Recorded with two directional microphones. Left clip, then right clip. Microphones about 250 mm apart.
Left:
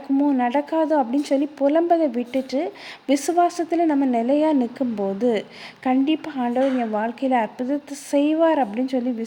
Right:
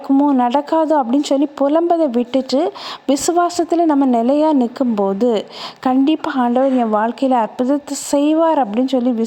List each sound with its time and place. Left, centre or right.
0.2 s speech: right